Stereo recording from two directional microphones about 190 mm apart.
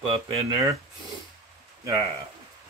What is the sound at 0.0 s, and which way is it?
Speech, 25° right (ahead or behind).